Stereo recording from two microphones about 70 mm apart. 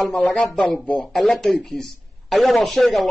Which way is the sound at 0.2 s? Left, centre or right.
Centre.